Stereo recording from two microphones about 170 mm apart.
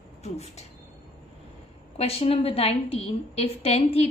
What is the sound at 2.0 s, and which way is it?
A woman's voice, 35° left (ahead or behind).